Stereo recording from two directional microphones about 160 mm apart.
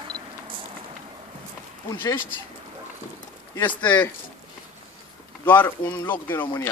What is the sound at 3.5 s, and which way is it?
Speech, 10° left (ahead or behind).